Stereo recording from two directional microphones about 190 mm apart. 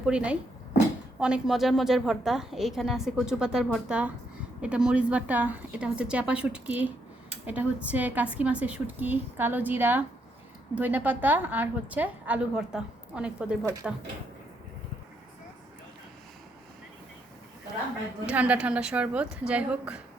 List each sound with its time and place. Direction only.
0.0 s a woman's voice: 5° right (ahead or behind)
13.6 s a woman's voice: 15° right (ahead or behind)
18.3 s a woman's voice: 5° right (ahead or behind)